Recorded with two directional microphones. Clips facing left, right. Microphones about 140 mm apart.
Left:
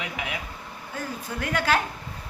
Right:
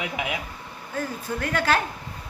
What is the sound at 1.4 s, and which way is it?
Speech, 15° left (ahead or behind).